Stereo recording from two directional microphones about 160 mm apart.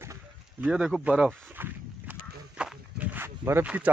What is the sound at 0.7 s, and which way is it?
Speech, 5° right (ahead or behind).